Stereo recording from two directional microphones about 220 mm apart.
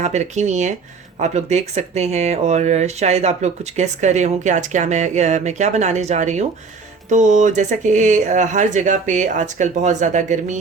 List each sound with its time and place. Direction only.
0.0 s speech: 30° right (ahead or behind)